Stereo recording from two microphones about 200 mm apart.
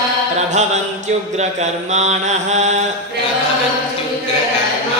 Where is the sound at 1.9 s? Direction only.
35° right (ahead or behind).